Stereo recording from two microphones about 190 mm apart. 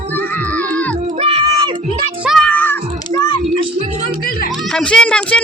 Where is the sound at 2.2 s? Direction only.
Centre (ahead or behind).